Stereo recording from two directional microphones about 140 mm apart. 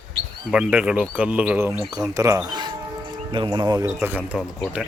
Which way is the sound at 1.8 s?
25° right (ahead or behind).